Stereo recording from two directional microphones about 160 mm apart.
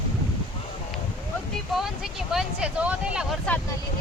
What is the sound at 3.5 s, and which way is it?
Speech, 10° left (ahead or behind).